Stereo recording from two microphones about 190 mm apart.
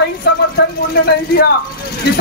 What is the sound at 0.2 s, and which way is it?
Speech, 60° left (ahead or behind).